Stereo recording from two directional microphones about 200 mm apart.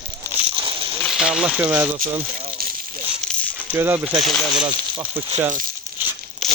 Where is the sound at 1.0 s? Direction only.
Centre (ahead or behind).